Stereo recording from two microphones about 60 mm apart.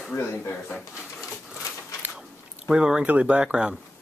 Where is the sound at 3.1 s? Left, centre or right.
Right.